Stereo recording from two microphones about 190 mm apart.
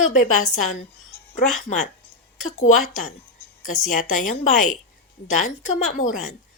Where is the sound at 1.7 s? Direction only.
40° left (ahead or behind).